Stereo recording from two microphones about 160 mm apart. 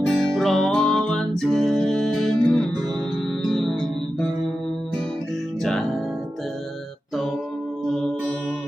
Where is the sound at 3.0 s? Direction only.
Centre (ahead or behind).